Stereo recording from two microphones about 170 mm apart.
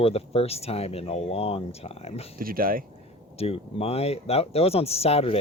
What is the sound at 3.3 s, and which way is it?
Speech, 35° left (ahead or behind).